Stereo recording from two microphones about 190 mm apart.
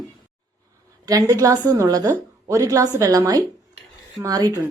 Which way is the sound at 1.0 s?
20° right (ahead or behind).